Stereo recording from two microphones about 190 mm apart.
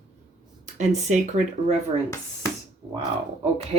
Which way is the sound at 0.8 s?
35° right (ahead or behind).